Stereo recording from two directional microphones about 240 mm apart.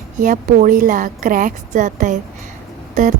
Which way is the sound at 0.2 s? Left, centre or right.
Right.